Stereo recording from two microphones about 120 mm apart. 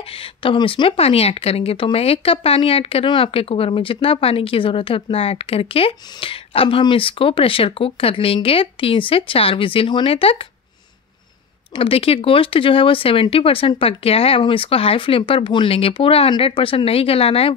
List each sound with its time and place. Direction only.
0.1 s speech: 50° left (ahead or behind)
11.7 s speech: 50° left (ahead or behind)